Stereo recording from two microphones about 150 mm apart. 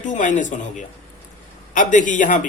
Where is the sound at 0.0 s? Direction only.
60° left (ahead or behind).